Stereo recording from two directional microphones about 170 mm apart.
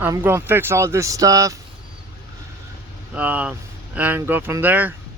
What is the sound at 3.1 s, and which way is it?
Speech, 10° right (ahead or behind).